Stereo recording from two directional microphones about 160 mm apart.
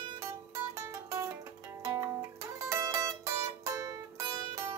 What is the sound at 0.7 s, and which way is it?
Music, 20° right (ahead or behind).